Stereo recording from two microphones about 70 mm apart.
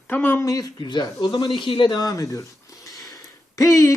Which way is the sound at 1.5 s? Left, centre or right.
Left.